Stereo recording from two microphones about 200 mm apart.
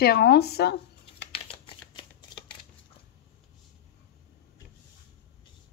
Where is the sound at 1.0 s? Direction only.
25° left (ahead or behind).